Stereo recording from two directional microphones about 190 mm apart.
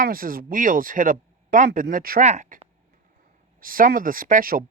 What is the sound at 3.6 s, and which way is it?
Speech, 45° right (ahead or behind).